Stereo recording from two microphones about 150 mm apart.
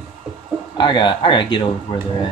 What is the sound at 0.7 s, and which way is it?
Speech, 30° left (ahead or behind).